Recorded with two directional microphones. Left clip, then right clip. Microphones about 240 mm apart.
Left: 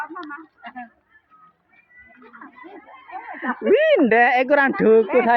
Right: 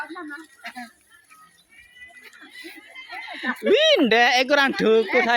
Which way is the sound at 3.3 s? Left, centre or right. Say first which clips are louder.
Left 2 dB; centre.